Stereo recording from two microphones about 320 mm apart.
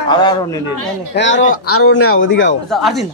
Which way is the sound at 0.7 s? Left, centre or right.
Right.